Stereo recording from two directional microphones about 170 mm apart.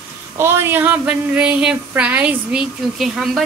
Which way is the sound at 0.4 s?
15° right (ahead or behind).